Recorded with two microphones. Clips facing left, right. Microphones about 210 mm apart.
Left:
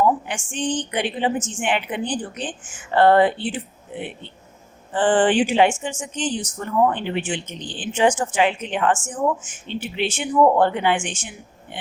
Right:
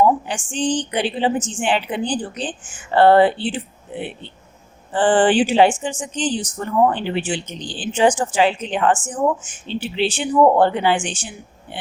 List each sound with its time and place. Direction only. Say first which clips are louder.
0.0 s speech: right 3 dB; 30° right (ahead or behind)